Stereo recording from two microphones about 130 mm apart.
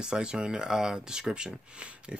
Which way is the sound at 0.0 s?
5° right (ahead or behind).